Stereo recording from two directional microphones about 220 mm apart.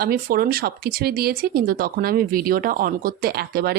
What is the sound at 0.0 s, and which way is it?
Speech, 40° right (ahead or behind).